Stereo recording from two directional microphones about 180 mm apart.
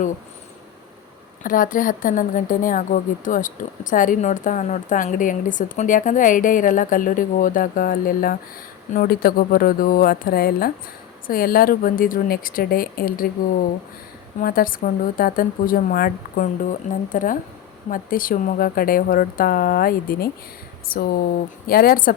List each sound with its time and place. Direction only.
1.5 s a woman's voice: 50° left (ahead or behind)
14.4 s a woman's voice: 50° left (ahead or behind)